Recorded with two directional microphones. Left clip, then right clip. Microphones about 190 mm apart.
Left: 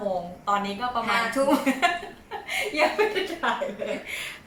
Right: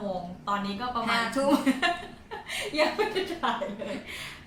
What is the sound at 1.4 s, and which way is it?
Speech, 15° right (ahead or behind).